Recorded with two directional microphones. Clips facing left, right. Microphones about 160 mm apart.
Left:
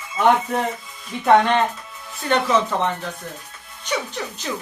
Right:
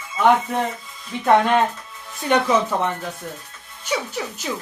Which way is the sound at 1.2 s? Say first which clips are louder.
Even; 5° right (ahead or behind).